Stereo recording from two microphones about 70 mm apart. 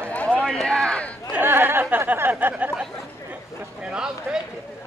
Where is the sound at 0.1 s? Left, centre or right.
Centre.